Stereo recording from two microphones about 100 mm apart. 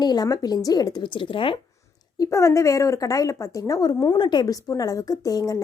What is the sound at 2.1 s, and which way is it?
Speech, 35° left (ahead or behind).